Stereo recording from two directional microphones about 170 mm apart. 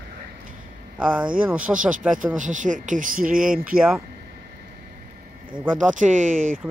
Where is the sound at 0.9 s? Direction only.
5° right (ahead or behind).